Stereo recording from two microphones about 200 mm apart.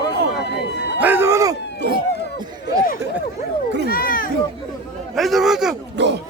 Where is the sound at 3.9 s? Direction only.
45° left (ahead or behind).